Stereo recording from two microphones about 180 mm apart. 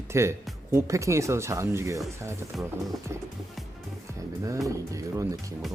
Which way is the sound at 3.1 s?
15° right (ahead or behind).